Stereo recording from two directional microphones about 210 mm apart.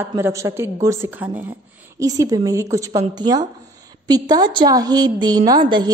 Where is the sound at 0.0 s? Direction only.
15° right (ahead or behind).